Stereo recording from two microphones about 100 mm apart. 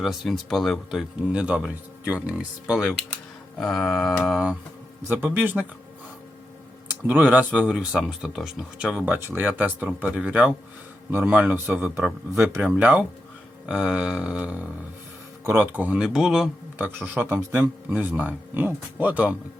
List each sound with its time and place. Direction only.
0.0 s speech: centre (ahead or behind)
3.6 s mantra: 5° left (ahead or behind)
5.0 s speech: 20° right (ahead or behind)
7.1 s speech: 15° right (ahead or behind)
12.3 s speech: 25° right (ahead or behind)
12.6 s speech: 10° right (ahead or behind)
16.8 s speech: 20° right (ahead or behind)